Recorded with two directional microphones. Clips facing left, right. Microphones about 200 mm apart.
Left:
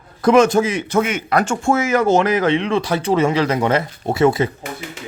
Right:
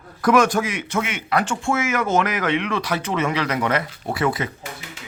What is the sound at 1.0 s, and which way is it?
Speech, 40° left (ahead or behind).